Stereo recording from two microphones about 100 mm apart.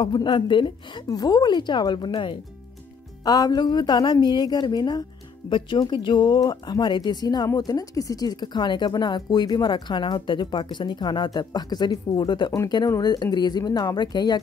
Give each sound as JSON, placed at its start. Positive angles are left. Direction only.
{"t": 0.0, "sound": "speech", "side_deg": 50}
{"t": 1.0, "sound": "speech", "side_deg": 40}
{"t": 3.3, "sound": "speech", "side_deg": 40}